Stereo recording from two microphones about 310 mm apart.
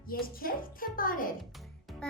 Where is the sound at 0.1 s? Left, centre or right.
Left.